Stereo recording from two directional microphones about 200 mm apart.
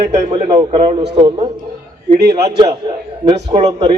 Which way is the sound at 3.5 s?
30° right (ahead or behind).